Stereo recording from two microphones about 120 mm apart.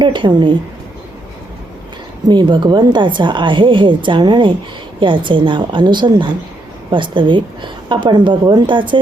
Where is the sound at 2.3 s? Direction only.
40° right (ahead or behind).